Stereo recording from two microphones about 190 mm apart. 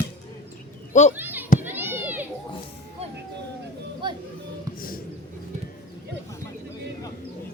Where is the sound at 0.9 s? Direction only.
40° left (ahead or behind).